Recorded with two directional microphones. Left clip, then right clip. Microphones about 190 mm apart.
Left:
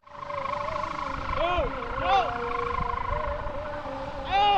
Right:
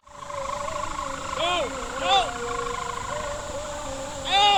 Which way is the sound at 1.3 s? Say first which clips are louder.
Right 2 dB; centre (ahead or behind).